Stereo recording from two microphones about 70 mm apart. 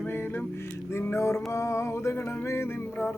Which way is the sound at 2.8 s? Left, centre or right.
Left.